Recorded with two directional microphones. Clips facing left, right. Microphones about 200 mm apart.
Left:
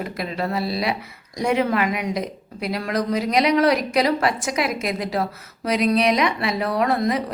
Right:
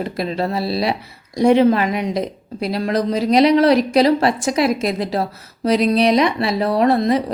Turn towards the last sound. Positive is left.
turn(degrees=-30)  # may be behind; listen again after turning